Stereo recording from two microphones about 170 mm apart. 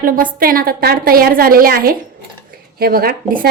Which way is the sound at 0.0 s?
55° right (ahead or behind).